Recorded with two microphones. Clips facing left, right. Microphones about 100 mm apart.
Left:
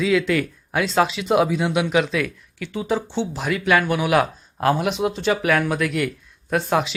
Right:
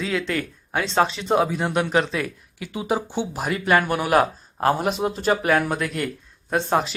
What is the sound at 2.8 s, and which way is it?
Speech, 10° right (ahead or behind).